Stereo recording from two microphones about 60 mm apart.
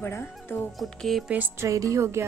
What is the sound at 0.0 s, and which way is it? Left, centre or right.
Speech, left.